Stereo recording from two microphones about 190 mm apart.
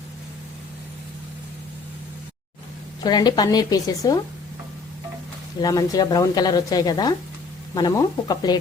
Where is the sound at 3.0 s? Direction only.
20° left (ahead or behind).